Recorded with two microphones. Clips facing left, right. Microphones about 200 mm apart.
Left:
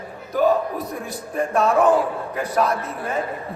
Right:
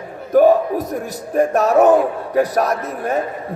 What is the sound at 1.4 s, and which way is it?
Music, 40° right (ahead or behind).